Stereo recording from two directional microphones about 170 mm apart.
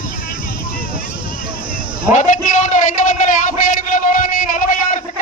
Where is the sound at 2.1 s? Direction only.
45° left (ahead or behind).